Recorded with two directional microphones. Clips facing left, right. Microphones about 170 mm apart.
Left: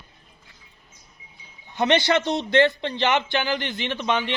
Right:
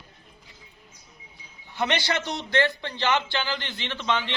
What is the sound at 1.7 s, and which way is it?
Speech, 20° left (ahead or behind).